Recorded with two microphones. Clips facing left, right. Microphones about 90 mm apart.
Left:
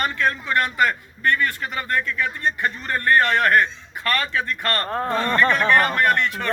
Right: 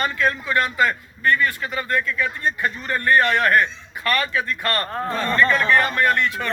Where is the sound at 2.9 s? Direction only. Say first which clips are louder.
Right 1 dB; 35° left (ahead or behind).